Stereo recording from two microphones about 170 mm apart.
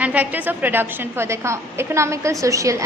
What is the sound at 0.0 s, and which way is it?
A woman's voice, 10° right (ahead or behind).